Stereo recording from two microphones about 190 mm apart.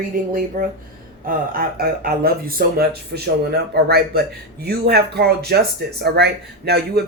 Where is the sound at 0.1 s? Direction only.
50° right (ahead or behind).